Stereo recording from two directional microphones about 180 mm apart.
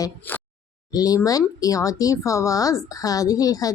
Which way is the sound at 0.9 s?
20° left (ahead or behind).